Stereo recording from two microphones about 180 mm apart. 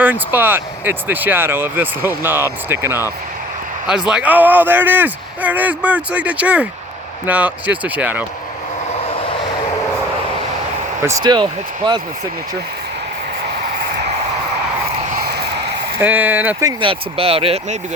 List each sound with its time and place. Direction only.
0.0 s speech: 10° right (ahead or behind)
4.1 s speech: 10° right (ahead or behind)
11.0 s speech: 20° right (ahead or behind)
16.0 s speech: 10° right (ahead or behind)
16.8 s speech: 30° right (ahead or behind)